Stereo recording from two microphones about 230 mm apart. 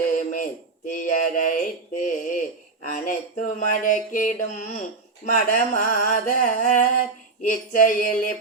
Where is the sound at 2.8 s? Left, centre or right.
Left.